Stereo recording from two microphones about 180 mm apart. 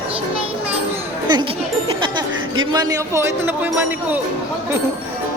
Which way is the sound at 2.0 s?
25° right (ahead or behind).